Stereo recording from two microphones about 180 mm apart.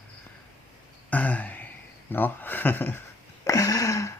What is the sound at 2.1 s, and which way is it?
Speech, 10° left (ahead or behind).